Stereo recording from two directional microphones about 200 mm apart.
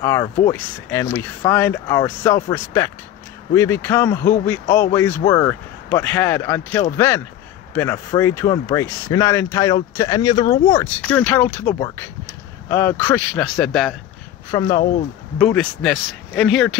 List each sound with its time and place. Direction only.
0.0 s speech: 15° left (ahead or behind)
14.5 s speech: 15° left (ahead or behind)
15.3 s speech: 5° left (ahead or behind)